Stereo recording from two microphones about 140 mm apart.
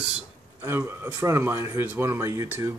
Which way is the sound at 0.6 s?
15° right (ahead or behind).